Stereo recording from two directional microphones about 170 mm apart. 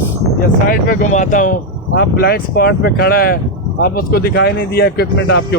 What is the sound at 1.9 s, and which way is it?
Speech, 65° left (ahead or behind).